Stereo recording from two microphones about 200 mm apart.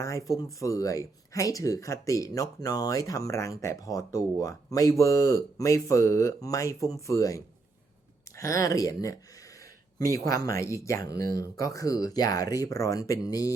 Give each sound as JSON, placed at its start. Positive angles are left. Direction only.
{"t": 0.0, "sound": "speech", "side_deg": 15}